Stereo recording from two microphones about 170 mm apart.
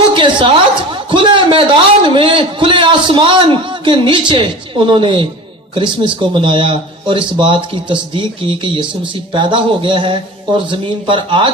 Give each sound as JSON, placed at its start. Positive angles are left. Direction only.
{"t": 0.1, "sound": "a man's voice", "side_deg": -30}